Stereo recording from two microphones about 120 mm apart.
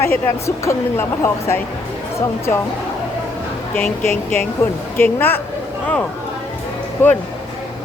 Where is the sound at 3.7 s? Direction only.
15° left (ahead or behind).